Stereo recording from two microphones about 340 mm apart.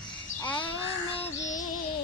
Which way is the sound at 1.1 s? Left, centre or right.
Centre.